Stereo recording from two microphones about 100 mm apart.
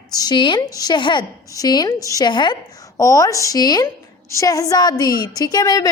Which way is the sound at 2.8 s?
35° left (ahead or behind).